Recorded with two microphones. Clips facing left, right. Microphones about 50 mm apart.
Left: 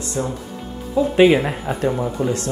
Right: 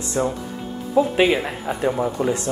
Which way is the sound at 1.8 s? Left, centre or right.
Centre.